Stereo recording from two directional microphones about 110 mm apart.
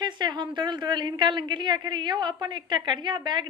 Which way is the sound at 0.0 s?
45° right (ahead or behind).